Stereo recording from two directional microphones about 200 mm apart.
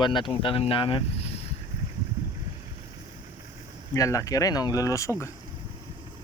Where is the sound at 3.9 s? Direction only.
15° left (ahead or behind).